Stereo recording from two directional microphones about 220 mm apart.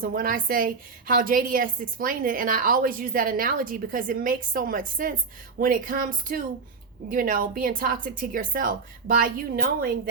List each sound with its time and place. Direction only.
0.0 s a woman's voice: 40° right (ahead or behind)